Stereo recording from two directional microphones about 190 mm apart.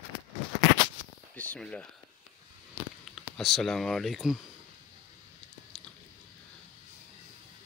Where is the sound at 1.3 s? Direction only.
10° left (ahead or behind).